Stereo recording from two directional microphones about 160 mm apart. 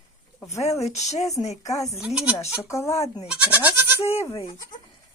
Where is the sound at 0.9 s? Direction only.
45° left (ahead or behind).